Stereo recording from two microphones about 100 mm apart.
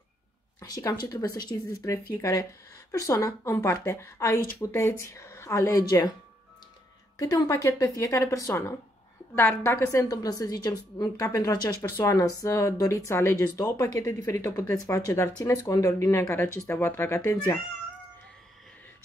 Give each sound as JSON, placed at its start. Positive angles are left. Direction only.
{"t": 0.6, "sound": "speech", "side_deg": 35}
{"t": 7.2, "sound": "speech", "side_deg": 40}
{"t": 10.1, "sound": "speech", "side_deg": 40}
{"t": 15.3, "sound": "speech", "side_deg": 35}